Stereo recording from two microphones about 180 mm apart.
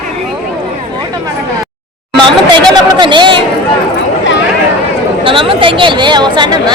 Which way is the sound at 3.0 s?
25° right (ahead or behind).